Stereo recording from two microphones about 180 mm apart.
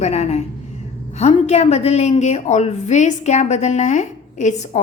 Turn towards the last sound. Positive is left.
turn(degrees=40)  # may be behind; listen again after turning